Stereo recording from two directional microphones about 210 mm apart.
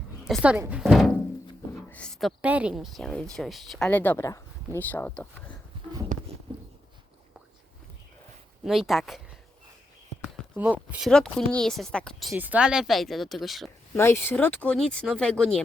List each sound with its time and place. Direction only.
0.3 s a woman's voice: 10° right (ahead or behind)
6.1 s a sound: 40° right (ahead or behind)
8.6 s a woman's voice: centre (ahead or behind)
10.2 s a woman's voice: centre (ahead or behind)
13.9 s speech: 10° left (ahead or behind)